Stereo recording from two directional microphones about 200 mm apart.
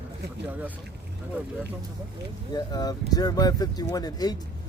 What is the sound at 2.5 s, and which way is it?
Speech, 20° left (ahead or behind).